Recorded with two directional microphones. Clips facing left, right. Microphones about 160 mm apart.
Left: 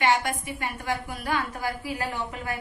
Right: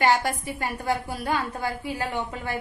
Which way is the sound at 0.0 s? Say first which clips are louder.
Right 2 dB; 35° right (ahead or behind).